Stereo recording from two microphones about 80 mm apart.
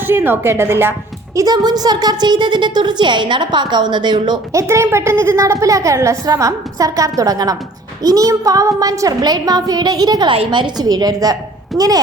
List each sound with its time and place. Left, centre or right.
0.0 s a woman's voice: right
1.4 s a woman's voice: right
4.5 s a woman's voice: right
10.8 s speech: right